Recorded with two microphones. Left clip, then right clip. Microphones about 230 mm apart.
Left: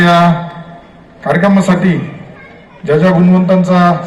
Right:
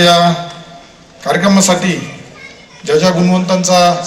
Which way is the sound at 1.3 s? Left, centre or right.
Right.